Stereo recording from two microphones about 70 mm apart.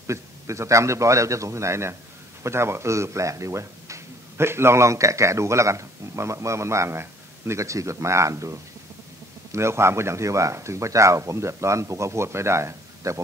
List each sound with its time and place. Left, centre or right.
0.0 s speech: right